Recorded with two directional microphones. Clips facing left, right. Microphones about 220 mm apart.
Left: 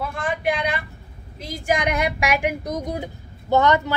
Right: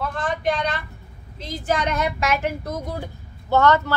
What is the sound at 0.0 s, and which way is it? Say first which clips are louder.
Vehicle: even; 10° left (ahead or behind).